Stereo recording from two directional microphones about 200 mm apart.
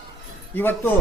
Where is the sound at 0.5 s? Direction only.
10° left (ahead or behind).